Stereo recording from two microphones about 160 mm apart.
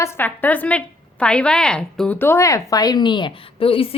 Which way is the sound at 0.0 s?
15° left (ahead or behind).